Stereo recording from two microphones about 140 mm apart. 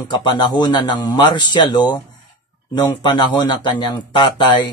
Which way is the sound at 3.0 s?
35° left (ahead or behind).